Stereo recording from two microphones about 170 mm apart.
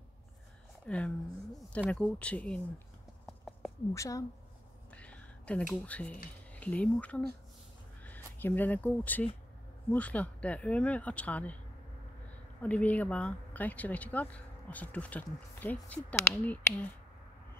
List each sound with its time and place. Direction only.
0.8 s speech: 5° left (ahead or behind)
3.9 s a woman's voice: 20° left (ahead or behind)
4.9 s a sound: 5° left (ahead or behind)
5.7 s speech: 5° left (ahead or behind)
12.6 s speech: 10° left (ahead or behind)